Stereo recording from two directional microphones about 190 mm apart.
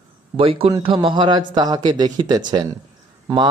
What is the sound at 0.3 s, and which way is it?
Speech, 30° right (ahead or behind).